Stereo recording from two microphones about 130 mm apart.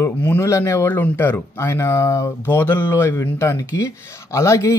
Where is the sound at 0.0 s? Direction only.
20° left (ahead or behind).